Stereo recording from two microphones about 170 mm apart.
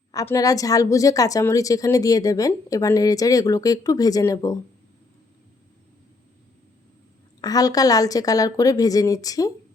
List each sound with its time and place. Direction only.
0.1 s a woman's voice: 20° left (ahead or behind)
7.4 s a woman's voice: 20° left (ahead or behind)